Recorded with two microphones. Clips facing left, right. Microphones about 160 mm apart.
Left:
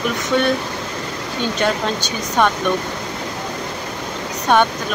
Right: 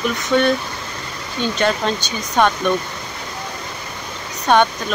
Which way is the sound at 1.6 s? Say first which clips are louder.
Right 1 dB; 10° left (ahead or behind).